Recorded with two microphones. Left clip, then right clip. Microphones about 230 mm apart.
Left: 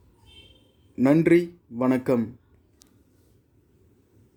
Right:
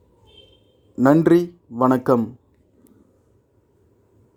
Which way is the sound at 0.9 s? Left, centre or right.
Centre.